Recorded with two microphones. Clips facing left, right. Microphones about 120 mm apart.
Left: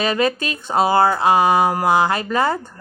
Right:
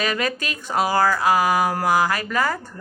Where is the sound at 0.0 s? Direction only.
25° left (ahead or behind).